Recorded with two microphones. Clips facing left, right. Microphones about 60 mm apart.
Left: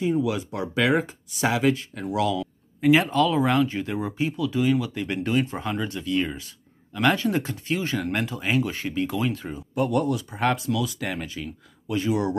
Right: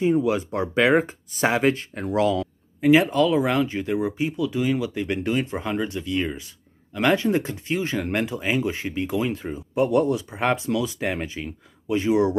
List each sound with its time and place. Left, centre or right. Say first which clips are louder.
0.2 s speech: right 3 dB; right
2.8 s speech: right 2 dB; centre
4.3 s speech: left 1 dB; right